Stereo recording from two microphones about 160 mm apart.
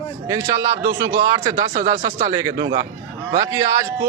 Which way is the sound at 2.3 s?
25° right (ahead or behind).